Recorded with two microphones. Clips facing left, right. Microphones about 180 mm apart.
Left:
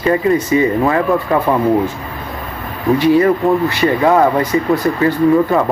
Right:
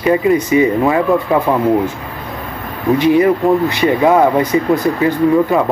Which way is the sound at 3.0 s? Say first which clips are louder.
Even; 20° right (ahead or behind).